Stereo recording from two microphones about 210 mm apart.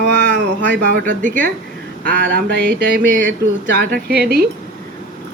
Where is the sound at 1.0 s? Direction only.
40° right (ahead or behind).